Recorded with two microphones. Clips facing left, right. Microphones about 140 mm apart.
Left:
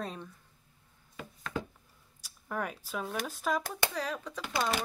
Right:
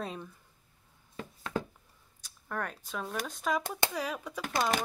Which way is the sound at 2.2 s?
10° left (ahead or behind).